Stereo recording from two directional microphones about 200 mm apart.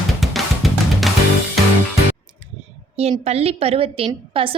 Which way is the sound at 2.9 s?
30° right (ahead or behind).